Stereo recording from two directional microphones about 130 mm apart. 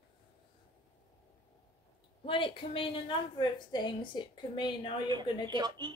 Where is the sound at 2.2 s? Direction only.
40° left (ahead or behind).